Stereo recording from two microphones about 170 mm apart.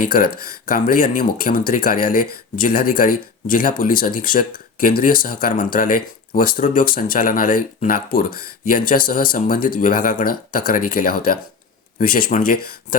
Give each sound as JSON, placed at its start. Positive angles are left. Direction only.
{"t": 0.0, "sound": "speech", "side_deg": 60}